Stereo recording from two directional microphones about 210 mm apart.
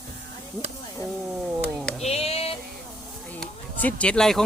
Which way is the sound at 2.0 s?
30° left (ahead or behind).